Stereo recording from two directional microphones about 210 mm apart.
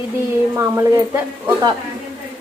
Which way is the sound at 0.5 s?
10° right (ahead or behind).